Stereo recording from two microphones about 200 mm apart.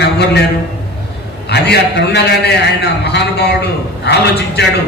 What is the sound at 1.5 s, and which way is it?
A man's voice, 55° left (ahead or behind).